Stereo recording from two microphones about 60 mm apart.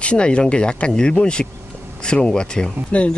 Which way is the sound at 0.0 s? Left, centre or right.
Centre.